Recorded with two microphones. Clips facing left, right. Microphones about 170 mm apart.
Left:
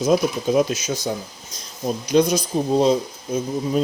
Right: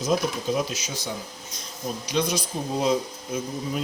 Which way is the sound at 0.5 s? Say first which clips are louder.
Left 8 dB; 50° left (ahead or behind).